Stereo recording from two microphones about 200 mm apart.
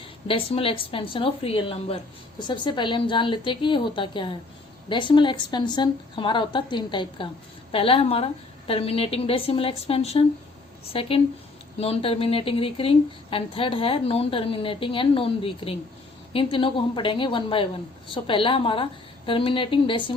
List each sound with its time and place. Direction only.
0.0 s a woman's voice: 25° left (ahead or behind)